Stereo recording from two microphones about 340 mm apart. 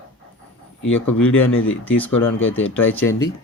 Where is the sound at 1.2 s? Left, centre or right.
Centre.